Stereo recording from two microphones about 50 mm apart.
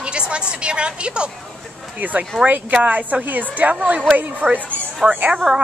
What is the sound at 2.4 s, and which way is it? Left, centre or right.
Speech, right.